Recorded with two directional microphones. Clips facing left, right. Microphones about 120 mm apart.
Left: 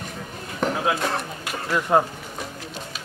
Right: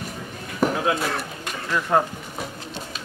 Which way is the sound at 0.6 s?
5° right (ahead or behind).